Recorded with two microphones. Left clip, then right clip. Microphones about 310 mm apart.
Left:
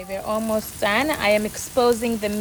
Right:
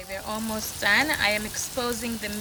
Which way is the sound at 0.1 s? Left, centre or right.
Centre.